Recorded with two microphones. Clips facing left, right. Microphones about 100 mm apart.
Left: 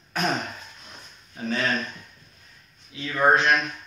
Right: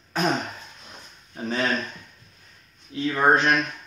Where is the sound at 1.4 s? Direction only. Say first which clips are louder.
Right 1 dB; 25° right (ahead or behind).